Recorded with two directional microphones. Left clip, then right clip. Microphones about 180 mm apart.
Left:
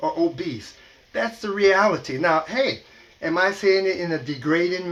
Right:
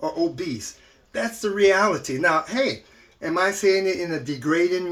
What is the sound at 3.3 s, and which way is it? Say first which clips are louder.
Speech: left 1 dB; 50° right (ahead or behind).